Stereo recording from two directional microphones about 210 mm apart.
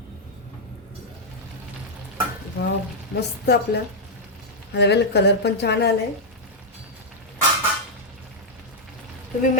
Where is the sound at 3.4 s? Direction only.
50° left (ahead or behind).